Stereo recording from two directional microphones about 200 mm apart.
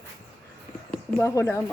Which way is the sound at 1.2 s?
15° left (ahead or behind).